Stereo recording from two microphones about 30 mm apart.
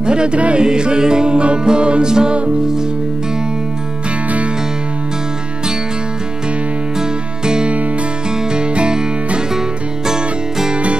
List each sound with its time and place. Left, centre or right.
0.0 s music: right
7.0 s music: right